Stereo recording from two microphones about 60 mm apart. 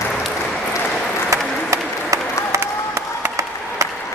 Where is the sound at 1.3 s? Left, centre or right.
Right.